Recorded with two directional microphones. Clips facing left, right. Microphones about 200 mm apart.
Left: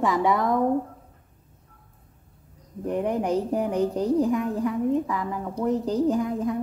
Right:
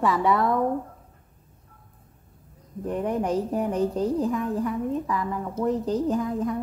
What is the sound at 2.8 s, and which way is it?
A woman's voice, 15° left (ahead or behind).